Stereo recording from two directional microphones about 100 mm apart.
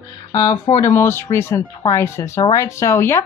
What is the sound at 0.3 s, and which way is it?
Speech, 35° left (ahead or behind).